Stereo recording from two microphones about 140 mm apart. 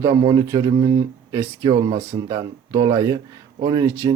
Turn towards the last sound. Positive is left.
turn(degrees=-25)  # may be behind; listen again after turning